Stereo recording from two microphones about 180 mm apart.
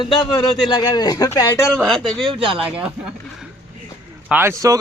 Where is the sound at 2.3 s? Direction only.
30° right (ahead or behind).